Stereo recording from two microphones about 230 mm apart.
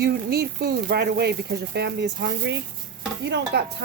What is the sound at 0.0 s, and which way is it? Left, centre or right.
Speech, right.